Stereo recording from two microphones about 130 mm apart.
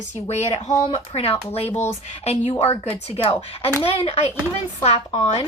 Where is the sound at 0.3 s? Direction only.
55° left (ahead or behind).